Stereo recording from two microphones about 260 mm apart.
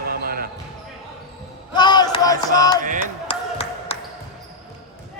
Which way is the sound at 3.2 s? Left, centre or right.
Left.